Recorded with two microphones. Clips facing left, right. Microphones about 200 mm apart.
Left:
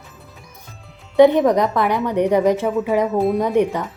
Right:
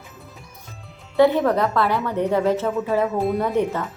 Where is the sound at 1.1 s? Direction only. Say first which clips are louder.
Left 4 dB; 20° left (ahead or behind).